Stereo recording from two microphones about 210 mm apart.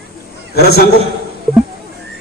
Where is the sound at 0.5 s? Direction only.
50° left (ahead or behind).